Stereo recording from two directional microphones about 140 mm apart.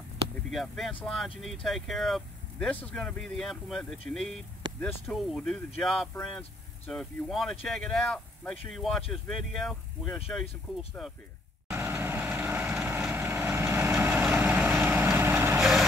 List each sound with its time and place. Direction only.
0.5 s speech: centre (ahead or behind)
11.7 s vehicle: 15° right (ahead or behind)